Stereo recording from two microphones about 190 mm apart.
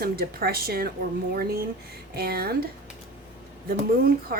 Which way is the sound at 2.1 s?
55° right (ahead or behind).